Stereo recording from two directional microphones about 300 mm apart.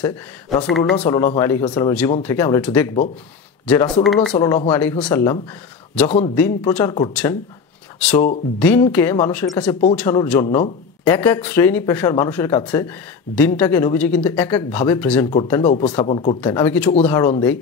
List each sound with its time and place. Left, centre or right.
0.7 s speech: centre
6.0 s a man's voice: left
6.3 s speech: centre
8.5 s speech: centre